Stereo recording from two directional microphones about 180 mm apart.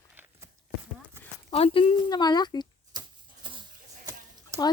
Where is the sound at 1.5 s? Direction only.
30° left (ahead or behind).